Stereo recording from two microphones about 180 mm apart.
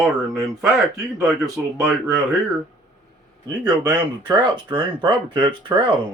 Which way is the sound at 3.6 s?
25° right (ahead or behind).